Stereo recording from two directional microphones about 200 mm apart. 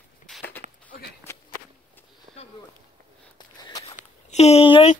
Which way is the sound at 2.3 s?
40° right (ahead or behind).